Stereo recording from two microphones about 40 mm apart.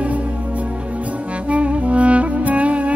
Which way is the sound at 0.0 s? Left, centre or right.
Right.